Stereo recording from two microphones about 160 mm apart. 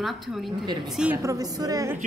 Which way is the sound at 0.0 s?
Centre (ahead or behind).